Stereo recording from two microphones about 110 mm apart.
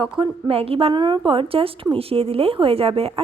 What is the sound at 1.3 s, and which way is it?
A woman's voice, 55° right (ahead or behind).